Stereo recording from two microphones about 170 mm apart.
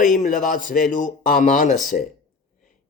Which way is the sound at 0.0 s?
50° left (ahead or behind).